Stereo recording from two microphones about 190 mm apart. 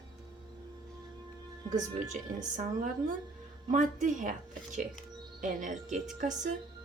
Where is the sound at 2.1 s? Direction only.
40° right (ahead or behind).